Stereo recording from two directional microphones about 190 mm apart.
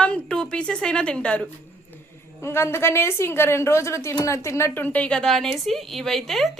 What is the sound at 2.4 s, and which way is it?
A woman's voice, 15° left (ahead or behind).